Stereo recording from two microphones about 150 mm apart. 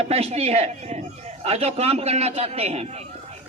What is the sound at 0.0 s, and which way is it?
A man's voice, 40° right (ahead or behind).